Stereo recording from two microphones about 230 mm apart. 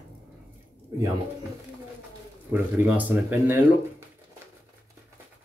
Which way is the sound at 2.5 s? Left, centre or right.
Centre.